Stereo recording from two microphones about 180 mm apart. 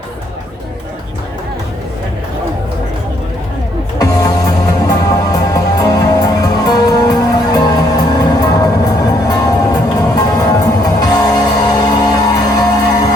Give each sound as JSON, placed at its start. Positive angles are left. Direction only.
{"t": 3.9, "sound": "music", "side_deg": 20}